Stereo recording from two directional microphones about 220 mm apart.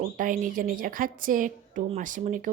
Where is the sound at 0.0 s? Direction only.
40° right (ahead or behind).